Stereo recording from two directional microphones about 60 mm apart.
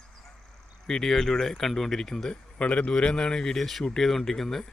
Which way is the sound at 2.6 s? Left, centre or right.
Centre.